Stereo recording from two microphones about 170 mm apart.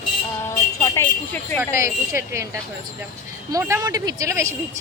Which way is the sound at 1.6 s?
15° right (ahead or behind).